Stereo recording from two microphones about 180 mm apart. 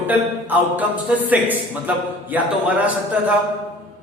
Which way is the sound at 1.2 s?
10° right (ahead or behind).